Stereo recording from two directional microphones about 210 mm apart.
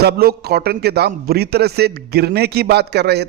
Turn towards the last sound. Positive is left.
turn(degrees=-50)  # may be behind; listen again after turning